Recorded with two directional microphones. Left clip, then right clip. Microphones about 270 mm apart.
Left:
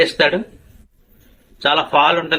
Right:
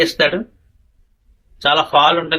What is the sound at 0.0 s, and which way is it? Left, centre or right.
Speech, centre.